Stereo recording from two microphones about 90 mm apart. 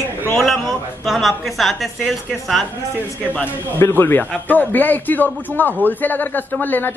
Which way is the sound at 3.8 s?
25° left (ahead or behind).